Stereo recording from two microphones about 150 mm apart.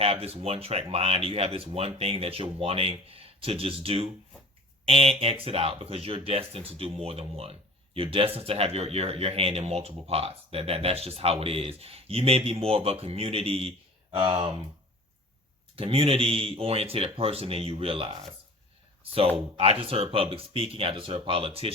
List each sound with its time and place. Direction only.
0.0 s speech: 40° right (ahead or behind)
15.7 s speech: 40° right (ahead or behind)
19.8 s speech: 40° right (ahead or behind)